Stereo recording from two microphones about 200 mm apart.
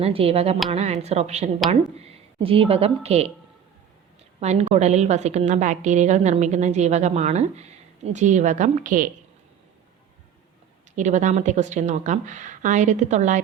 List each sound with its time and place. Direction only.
0.0 s a woman's voice: 30° right (ahead or behind)
4.4 s a woman's voice: 30° right (ahead or behind)
10.9 s a woman's voice: 35° right (ahead or behind)